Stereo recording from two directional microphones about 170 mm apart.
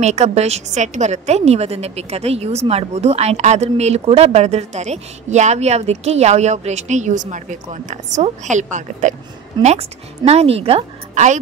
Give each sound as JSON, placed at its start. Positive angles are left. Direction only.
{"t": 0.0, "sound": "a woman's voice", "side_deg": -40}